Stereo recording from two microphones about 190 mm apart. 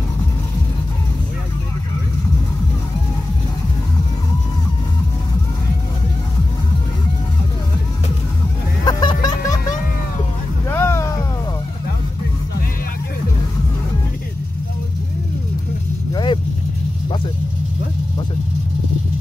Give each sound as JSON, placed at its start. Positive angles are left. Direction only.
{"t": 8.8, "sound": "music", "side_deg": 20}
{"t": 10.7, "sound": "a sound", "side_deg": 15}
{"t": 16.1, "sound": "vehicle", "side_deg": 25}